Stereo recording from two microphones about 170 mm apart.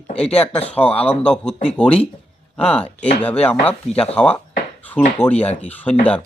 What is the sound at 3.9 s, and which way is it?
Speech, 35° left (ahead or behind).